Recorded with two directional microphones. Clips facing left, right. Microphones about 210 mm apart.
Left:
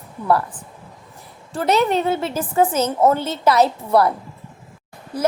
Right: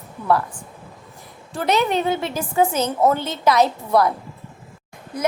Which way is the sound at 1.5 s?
30° left (ahead or behind).